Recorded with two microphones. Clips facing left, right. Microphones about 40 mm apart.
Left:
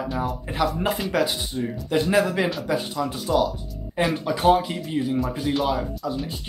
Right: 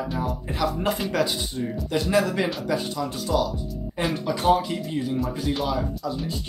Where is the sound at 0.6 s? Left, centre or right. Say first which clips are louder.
Left 1 dB; centre.